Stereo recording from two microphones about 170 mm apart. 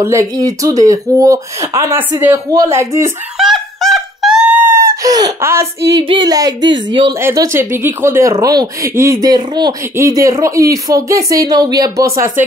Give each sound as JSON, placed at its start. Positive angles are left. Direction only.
{"t": 0.0, "sound": "speech", "side_deg": -20}
{"t": 3.3, "sound": "a sound", "side_deg": 0}
{"t": 6.0, "sound": "speech", "side_deg": -25}
{"t": 7.2, "sound": "speech", "side_deg": -15}